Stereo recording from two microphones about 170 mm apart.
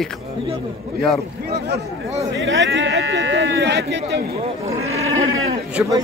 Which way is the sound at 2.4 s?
90° right.